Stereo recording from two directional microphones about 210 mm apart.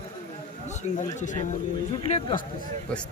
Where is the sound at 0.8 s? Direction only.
35° left (ahead or behind).